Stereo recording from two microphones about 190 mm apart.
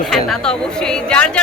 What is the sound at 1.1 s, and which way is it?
Speech, 5° left (ahead or behind).